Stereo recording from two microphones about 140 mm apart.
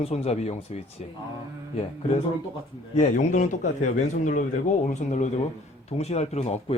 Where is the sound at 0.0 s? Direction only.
50° left (ahead or behind).